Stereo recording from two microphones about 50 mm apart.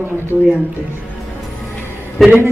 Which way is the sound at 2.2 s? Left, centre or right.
Centre.